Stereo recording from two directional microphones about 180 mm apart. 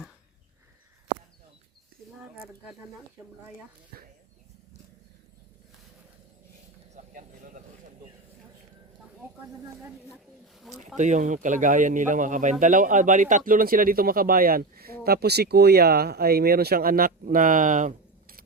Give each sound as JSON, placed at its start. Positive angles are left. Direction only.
{"t": 2.1, "sound": "speech", "side_deg": -5}
{"t": 3.9, "sound": "speech", "side_deg": -55}
{"t": 6.9, "sound": "speech", "side_deg": -45}
{"t": 10.9, "sound": "speech", "side_deg": -45}